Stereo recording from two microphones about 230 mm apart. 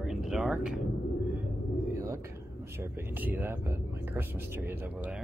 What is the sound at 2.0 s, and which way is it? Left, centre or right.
Speech, centre.